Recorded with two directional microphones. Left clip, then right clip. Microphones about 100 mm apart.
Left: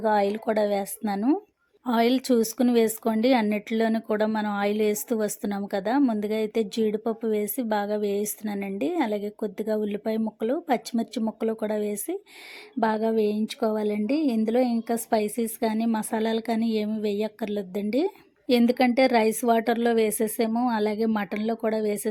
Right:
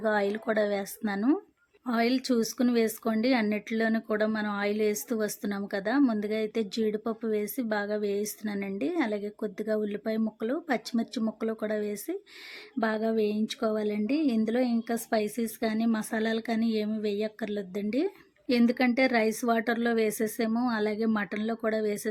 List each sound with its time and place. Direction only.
0.0 s speech: 15° left (ahead or behind)
1.9 s a woman's voice: 35° left (ahead or behind)